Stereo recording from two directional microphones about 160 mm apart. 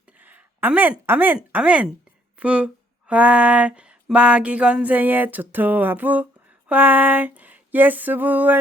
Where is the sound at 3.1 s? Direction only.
10° right (ahead or behind).